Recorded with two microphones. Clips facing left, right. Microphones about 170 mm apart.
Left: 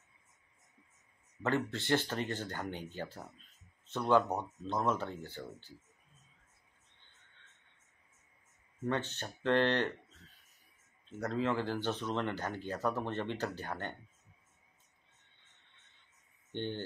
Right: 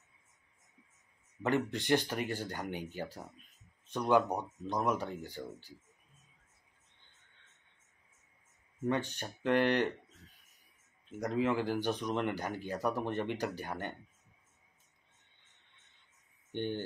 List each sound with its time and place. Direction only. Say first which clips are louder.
1.4 s speech: right 2 dB; 15° right (ahead or behind)
8.8 s speech: right 2 dB; 15° right (ahead or behind)
11.1 s speech: right 2 dB; 15° right (ahead or behind)
16.5 s speech: right 2 dB; 15° right (ahead or behind)